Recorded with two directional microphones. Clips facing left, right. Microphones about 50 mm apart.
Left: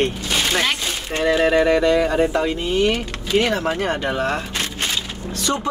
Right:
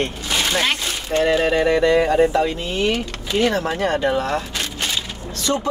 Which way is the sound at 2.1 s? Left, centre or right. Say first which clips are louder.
Right 2 dB; centre.